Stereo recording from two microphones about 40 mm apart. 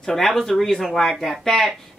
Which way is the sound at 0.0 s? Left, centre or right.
Centre.